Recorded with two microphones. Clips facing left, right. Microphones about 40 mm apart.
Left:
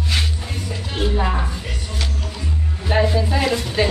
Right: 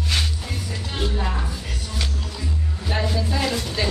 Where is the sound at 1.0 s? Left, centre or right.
Centre.